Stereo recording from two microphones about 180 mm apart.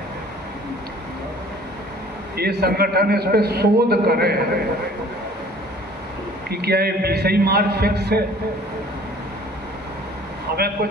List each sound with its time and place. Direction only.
2.3 s a man's voice: 60° right (ahead or behind)
6.5 s a man's voice: 60° right (ahead or behind)